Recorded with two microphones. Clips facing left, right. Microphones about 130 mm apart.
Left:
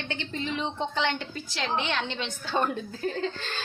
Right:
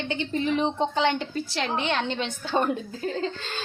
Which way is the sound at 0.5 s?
35° right (ahead or behind).